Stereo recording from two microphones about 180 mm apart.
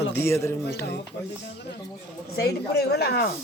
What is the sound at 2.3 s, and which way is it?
Speech, 60° left (ahead or behind).